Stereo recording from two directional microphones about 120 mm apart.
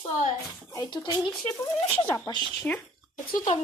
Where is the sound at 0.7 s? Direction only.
35° left (ahead or behind).